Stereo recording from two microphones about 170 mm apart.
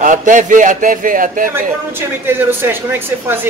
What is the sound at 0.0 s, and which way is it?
Speech, 50° right (ahead or behind).